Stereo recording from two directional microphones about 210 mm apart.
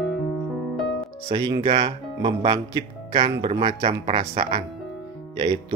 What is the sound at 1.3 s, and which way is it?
Speech, 25° right (ahead or behind).